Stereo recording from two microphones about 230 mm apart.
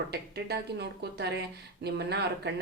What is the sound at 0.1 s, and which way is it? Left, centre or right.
Speech, right.